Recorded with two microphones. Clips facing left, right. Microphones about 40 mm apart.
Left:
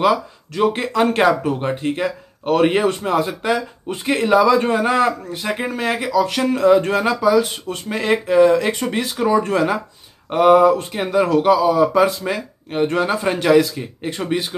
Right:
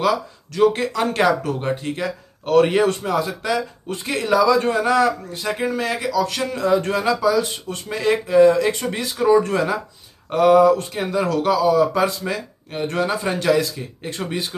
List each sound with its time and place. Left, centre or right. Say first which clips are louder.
0.0 s speech: left 3 dB; left
8.6 s speech: left 2 dB; left
9.1 s speech: right 2 dB; left